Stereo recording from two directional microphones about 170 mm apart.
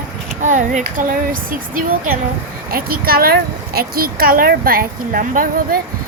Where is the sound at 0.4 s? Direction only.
45° right (ahead or behind).